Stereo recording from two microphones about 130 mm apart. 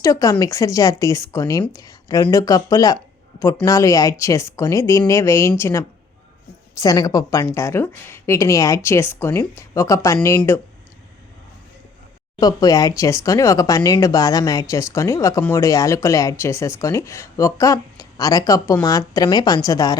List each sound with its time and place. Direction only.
0.0 s speech: 25° left (ahead or behind)
12.4 s speech: 30° left (ahead or behind)